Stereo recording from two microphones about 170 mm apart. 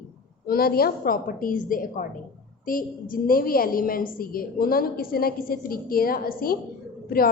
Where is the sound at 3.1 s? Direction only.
55° left (ahead or behind).